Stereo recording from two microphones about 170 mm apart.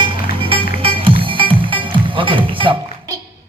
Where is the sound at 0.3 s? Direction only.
30° right (ahead or behind).